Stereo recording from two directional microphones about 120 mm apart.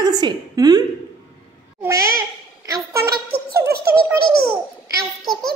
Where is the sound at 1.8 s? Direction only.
25° right (ahead or behind).